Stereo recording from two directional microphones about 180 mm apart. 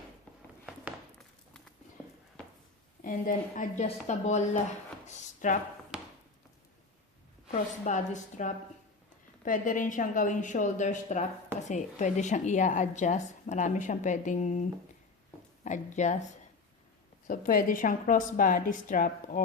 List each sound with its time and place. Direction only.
3.0 s a woman's voice: 45° left (ahead or behind)
5.0 s a sound: 40° left (ahead or behind)
5.9 s a sound: 5° right (ahead or behind)
7.5 s a woman's voice: 40° left (ahead or behind)
15.6 s speech: 40° left (ahead or behind)
17.2 s a woman's voice: 50° left (ahead or behind)